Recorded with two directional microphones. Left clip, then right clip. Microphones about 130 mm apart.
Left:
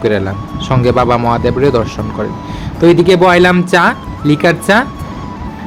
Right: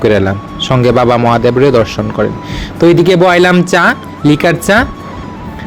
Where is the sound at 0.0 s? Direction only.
35° right (ahead or behind).